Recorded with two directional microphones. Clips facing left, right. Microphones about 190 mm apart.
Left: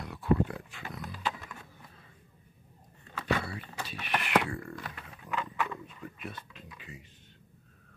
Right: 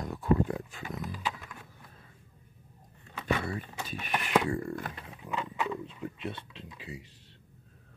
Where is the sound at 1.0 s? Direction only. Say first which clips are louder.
Left 3 dB; 5° right (ahead or behind).